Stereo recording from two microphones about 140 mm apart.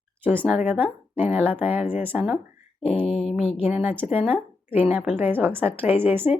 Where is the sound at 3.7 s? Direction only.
10° right (ahead or behind).